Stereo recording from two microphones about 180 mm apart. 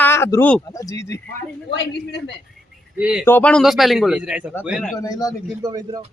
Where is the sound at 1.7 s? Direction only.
75° left (ahead or behind).